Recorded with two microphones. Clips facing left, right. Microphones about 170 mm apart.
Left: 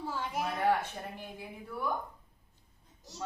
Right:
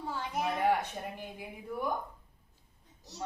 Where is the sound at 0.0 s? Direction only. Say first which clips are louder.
Even; centre (ahead or behind).